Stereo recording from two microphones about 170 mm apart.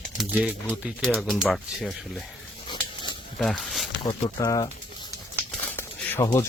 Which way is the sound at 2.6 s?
25° left (ahead or behind).